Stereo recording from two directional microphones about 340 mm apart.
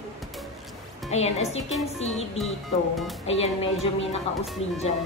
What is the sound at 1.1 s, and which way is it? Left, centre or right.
Speech, centre.